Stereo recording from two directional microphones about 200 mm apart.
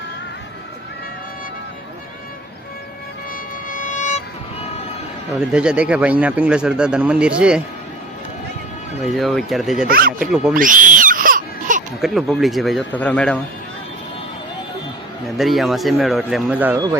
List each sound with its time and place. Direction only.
3.7 s music: 40° left (ahead or behind)
4.6 s vehicle: 30° left (ahead or behind)
5.5 s speech: 5° right (ahead or behind)
9.1 s speech: centre (ahead or behind)
9.8 s speech: 45° right (ahead or behind)
10.2 s speech: 5° right (ahead or behind)
10.5 s baby cry: 40° right (ahead or behind)
11.9 s speech: centre (ahead or behind)
15.4 s speech: centre (ahead or behind)